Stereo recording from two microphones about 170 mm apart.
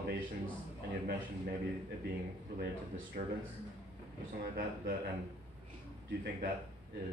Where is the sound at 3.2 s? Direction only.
55° right (ahead or behind).